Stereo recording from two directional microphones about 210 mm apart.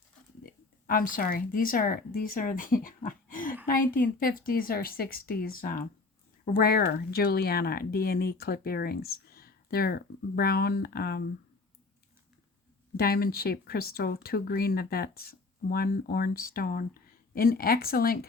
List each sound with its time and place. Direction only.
0.4 s speech: 40° left (ahead or behind)
13.0 s speech: 45° left (ahead or behind)